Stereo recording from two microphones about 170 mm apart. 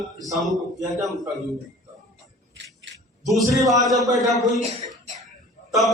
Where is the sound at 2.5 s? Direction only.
90° right.